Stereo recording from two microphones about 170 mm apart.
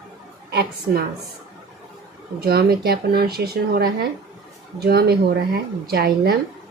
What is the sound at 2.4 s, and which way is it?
Speech, 65° right (ahead or behind).